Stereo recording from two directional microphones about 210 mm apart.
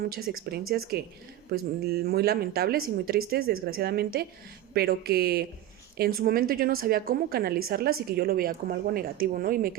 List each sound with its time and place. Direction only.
0.1 s speech: 45° right (ahead or behind)